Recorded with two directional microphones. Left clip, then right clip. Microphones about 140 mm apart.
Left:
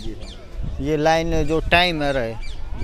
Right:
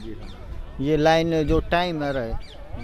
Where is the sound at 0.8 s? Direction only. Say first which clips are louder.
Even; 45° right (ahead or behind).